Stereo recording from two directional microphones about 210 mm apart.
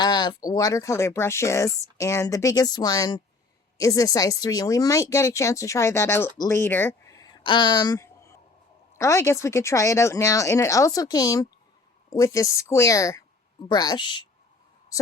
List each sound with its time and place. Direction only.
0.0 s speech: 20° left (ahead or behind)